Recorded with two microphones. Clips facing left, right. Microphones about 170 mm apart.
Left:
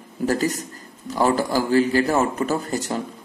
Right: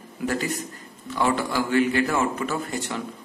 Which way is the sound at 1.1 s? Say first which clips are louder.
Left 4 dB; 35° left (ahead or behind).